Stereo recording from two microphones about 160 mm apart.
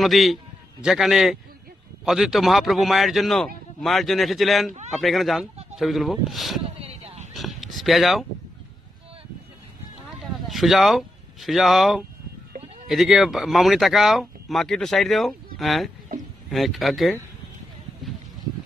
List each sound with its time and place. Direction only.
0.0 s speech: centre (ahead or behind)
6.8 s vehicle: 40° right (ahead or behind)
7.3 s a sound: centre (ahead or behind)
10.5 s speech: centre (ahead or behind)